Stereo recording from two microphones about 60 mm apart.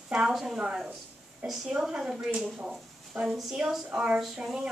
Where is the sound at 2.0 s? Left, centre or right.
Centre.